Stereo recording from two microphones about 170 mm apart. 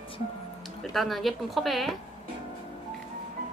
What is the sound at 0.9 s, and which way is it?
A woman's voice, centre (ahead or behind).